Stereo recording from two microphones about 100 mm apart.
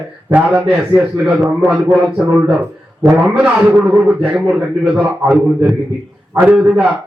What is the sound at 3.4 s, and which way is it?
A man's voice, 10° right (ahead or behind).